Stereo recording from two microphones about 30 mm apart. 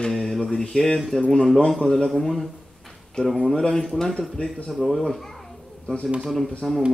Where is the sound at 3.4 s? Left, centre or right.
Centre.